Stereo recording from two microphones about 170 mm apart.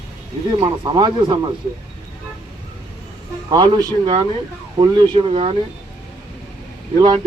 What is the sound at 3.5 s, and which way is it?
Speech, 25° right (ahead or behind).